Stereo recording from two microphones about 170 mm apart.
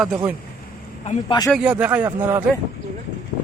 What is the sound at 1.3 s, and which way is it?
Speech, 20° left (ahead or behind).